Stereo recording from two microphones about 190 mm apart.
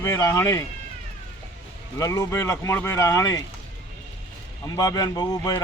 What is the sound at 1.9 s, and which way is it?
Speech, 15° left (ahead or behind).